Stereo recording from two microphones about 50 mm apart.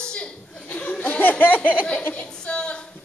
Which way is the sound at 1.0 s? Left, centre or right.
Left.